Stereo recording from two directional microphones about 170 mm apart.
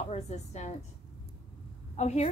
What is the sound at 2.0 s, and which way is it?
Speech, 40° left (ahead or behind).